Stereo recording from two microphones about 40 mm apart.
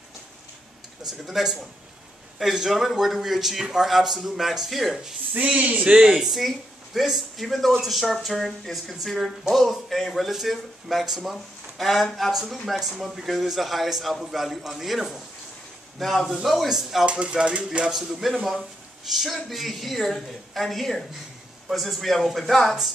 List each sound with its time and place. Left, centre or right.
1.2 s a man's voice: centre
5.3 s speech: right
6.0 s a man's voice: centre
12.3 s a man's voice: centre
17.0 s a sound: right
17.9 s a man's voice: centre